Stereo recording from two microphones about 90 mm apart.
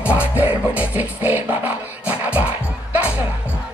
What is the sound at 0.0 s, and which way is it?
Music, 15° right (ahead or behind).